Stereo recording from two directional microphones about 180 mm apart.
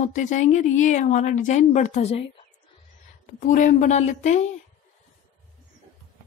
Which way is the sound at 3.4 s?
45° left (ahead or behind).